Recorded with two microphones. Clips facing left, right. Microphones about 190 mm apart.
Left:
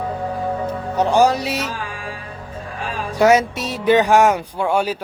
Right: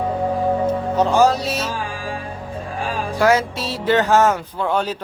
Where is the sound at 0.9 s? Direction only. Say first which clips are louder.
Left 1 dB; 15° left (ahead or behind).